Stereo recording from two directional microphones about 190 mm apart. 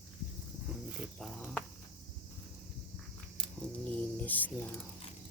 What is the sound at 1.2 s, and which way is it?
Speech, centre (ahead or behind).